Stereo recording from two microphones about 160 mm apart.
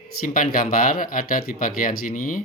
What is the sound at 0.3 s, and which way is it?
Speech, 60° left (ahead or behind).